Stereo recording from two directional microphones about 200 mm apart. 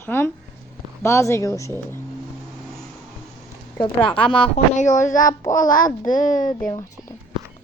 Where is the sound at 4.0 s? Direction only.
5° left (ahead or behind).